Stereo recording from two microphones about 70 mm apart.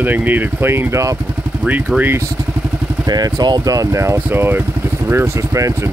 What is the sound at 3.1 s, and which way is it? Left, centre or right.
Speech, right.